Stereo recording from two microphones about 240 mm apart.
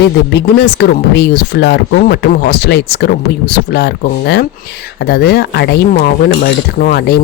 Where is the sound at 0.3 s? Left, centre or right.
Left.